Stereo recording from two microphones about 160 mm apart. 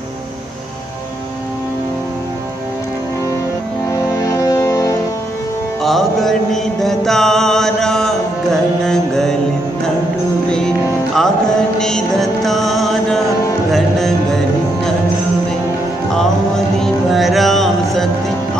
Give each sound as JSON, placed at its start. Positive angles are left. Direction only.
{"t": 3.9, "sound": "music", "side_deg": 20}
{"t": 5.8, "sound": "mantra", "side_deg": 0}
{"t": 11.1, "sound": "music", "side_deg": 5}
{"t": 16.1, "sound": "music", "side_deg": 5}